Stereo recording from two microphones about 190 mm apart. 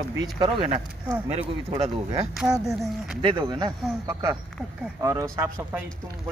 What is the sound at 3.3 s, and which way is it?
Speech, 25° right (ahead or behind).